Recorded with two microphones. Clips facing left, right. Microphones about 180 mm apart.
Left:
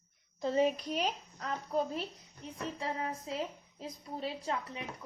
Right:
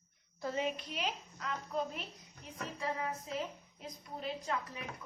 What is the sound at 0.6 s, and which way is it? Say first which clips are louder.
Speech: left 6 dB; 40° left (ahead or behind).